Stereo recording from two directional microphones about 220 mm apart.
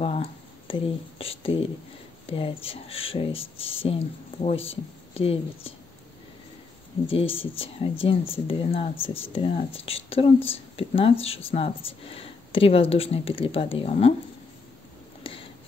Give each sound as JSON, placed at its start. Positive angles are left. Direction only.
{"t": 0.0, "sound": "speech", "side_deg": 25}
{"t": 7.1, "sound": "speech", "side_deg": 25}
{"t": 15.2, "sound": "a sound", "side_deg": 25}